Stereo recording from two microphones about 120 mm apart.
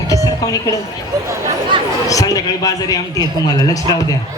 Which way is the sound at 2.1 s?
30° left (ahead or behind).